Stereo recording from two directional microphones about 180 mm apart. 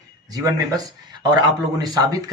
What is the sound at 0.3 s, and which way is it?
Speech, 20° right (ahead or behind).